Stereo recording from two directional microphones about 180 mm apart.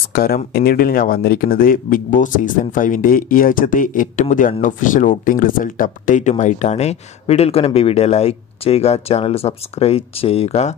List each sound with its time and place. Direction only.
0.1 s speech: 55° left (ahead or behind); by 10.7 s 35° left (ahead or behind)